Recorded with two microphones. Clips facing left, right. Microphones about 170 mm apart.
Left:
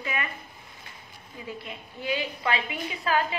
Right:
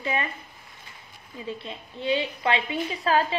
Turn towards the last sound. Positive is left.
turn(degrees=-30)  # may be behind; listen again after turning